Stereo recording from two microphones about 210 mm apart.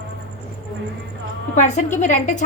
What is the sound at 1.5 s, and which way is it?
Speech, 35° left (ahead or behind).